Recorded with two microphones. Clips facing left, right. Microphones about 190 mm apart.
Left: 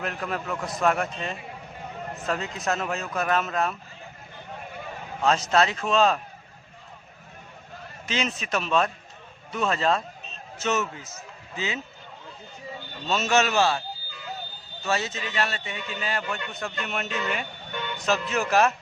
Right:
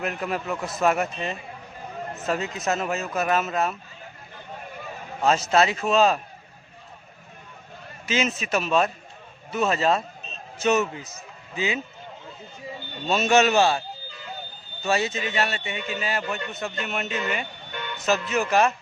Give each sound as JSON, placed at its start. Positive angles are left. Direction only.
{"t": 0.0, "sound": "a man's voice", "side_deg": -10}
{"t": 5.2, "sound": "a man's voice", "side_deg": -5}
{"t": 8.0, "sound": "a man's voice", "side_deg": -5}
{"t": 13.1, "sound": "a man's voice", "side_deg": -15}
{"t": 14.8, "sound": "a man's voice", "side_deg": -10}